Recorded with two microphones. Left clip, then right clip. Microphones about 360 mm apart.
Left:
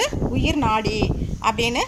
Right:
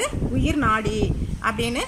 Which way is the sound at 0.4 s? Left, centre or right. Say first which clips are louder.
Even; left.